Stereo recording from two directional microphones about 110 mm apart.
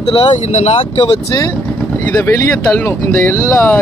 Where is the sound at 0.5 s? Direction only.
75° left (ahead or behind).